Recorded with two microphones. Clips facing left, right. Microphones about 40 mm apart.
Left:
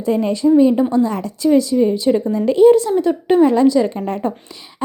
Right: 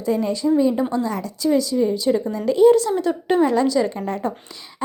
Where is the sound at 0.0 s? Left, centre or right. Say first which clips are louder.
Left 5 dB; left.